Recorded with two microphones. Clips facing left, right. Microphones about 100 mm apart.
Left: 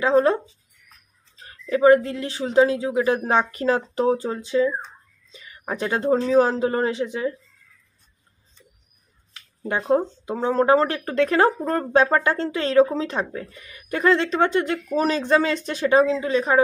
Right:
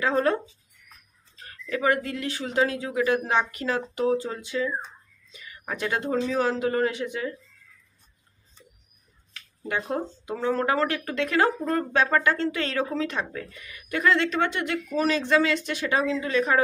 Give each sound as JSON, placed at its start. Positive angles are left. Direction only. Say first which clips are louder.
{"t": 0.0, "sound": "speech", "louder": "left 5 dB", "side_deg": 25}
{"t": 9.3, "sound": "speech", "louder": "left 3 dB", "side_deg": 30}